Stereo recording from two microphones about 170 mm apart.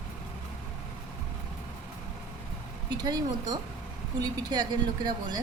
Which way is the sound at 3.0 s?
25° right (ahead or behind).